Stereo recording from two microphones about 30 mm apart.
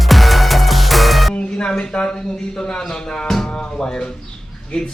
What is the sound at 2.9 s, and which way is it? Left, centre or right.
Music, left.